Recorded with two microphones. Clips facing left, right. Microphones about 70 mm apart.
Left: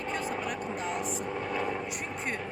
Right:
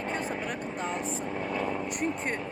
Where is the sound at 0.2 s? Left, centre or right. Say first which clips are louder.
Even; right.